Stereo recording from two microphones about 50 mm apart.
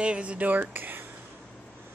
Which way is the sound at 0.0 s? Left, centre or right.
Right.